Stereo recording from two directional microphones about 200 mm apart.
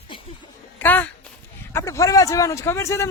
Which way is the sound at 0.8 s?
10° left (ahead or behind).